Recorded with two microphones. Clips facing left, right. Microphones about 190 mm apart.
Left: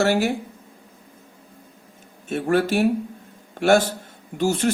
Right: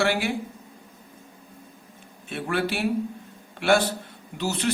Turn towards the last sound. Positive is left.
turn(degrees=50)  # may be behind; listen again after turning